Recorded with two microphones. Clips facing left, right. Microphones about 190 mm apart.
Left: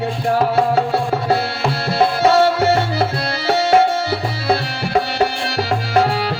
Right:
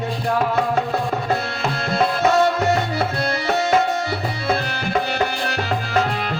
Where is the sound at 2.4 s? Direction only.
35° left (ahead or behind).